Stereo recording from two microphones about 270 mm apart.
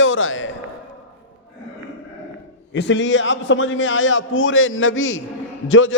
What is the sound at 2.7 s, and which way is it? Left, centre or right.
A man's voice, left.